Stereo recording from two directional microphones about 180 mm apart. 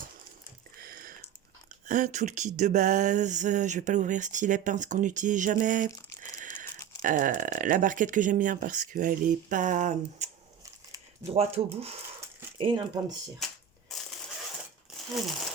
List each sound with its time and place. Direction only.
0.8 s a sound: 55° right (ahead or behind)
1.9 s speech: 45° right (ahead or behind)
11.3 s speech: 35° right (ahead or behind)